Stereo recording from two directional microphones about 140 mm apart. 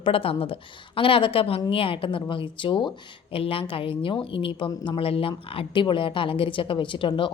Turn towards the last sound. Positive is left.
turn(degrees=35)  # may be behind; listen again after turning